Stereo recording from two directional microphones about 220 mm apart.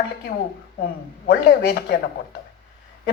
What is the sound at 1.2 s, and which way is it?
Speech, 45° left (ahead or behind).